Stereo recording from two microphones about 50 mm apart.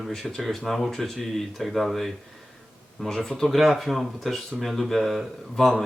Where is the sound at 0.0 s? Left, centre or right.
Centre.